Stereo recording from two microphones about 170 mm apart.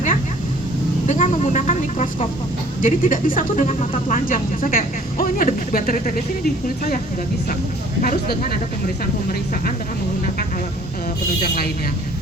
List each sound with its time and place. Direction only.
1.0 s speech: 45° left (ahead or behind)
8.0 s speech: 60° left (ahead or behind)
11.4 s speech: 65° left (ahead or behind)